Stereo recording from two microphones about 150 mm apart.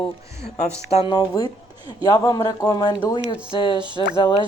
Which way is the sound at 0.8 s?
40° left (ahead or behind).